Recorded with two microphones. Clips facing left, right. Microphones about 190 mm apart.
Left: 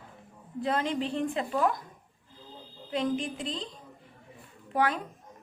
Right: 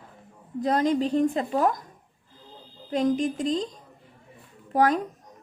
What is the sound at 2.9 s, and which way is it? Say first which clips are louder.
A woman's voice: right 6 dB; 45° right (ahead or behind).